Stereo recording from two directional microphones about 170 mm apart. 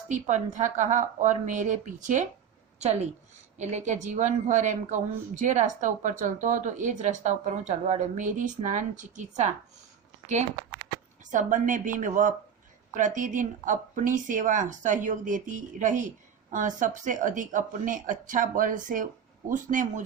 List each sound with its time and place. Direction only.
0.1 s a woman's voice: 45° right (ahead or behind)
11.3 s speech: 50° right (ahead or behind)